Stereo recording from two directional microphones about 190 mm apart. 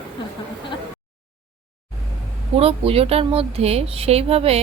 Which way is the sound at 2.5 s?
30° right (ahead or behind).